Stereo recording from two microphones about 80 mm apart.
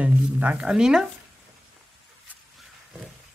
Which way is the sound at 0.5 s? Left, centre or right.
Centre.